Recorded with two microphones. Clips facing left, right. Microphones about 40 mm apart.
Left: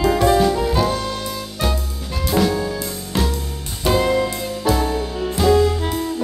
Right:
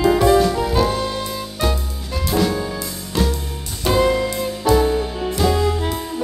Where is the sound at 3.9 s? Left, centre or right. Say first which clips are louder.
Even; centre.